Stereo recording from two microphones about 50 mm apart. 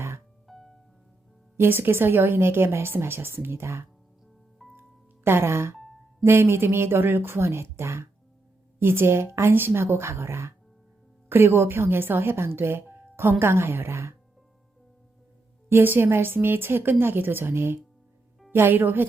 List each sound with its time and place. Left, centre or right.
0.4 s music: centre
1.5 s speech: right
2.9 s speech: right
4.8 s music: right
5.8 s music: centre
6.2 s a woman's voice: right
9.6 s speech: right
9.8 s a woman's voice: right
11.3 s a woman's voice: right
15.7 s speech: right